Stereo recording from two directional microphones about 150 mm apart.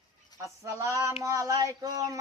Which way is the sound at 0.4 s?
20° right (ahead or behind).